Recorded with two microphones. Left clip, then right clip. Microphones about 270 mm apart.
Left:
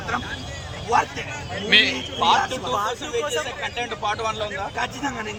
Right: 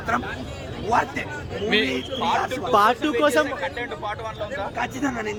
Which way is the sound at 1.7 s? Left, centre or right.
Centre.